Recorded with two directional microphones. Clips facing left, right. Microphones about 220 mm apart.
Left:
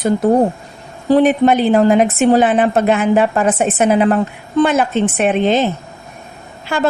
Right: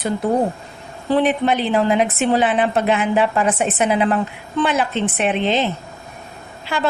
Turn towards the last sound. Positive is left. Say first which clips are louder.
# left 4 dB
turn(degrees=50)  # may be behind; listen again after turning